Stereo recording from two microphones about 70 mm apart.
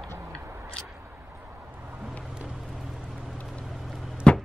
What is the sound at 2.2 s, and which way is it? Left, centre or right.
Vehicle, centre.